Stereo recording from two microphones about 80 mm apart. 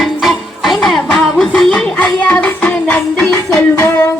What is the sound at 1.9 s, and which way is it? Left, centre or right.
Music, centre.